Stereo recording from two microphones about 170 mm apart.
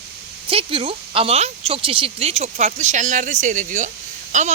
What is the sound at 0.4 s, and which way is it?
Speech, 30° right (ahead or behind).